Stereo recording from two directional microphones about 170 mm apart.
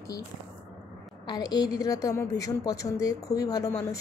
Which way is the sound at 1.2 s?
25° left (ahead or behind).